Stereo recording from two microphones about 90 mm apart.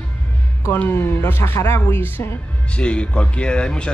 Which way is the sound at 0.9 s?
25° left (ahead or behind).